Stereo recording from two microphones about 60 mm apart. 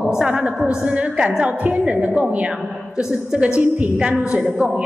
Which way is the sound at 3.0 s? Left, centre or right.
Centre.